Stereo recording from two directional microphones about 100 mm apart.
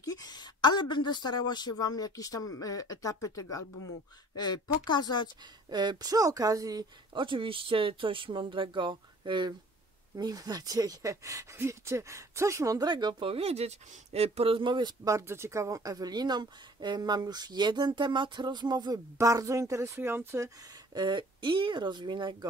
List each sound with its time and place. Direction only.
0.0 s a woman's voice: 40° left (ahead or behind)
4.4 s speech: 45° left (ahead or behind)
5.7 s speech: 45° right (ahead or behind)
7.2 s speech: 60° right (ahead or behind)
10.1 s speech: 40° right (ahead or behind)
12.8 s speech: 50° right (ahead or behind)
13.3 s speech: 85° right; by 15.0 s 50° right (ahead or behind)
15.0 s speech: 30° right (ahead or behind); by 18.9 s 45° right (ahead or behind)
19.1 s speech: 35° right (ahead or behind)
20.9 s speech: 50° right (ahead or behind)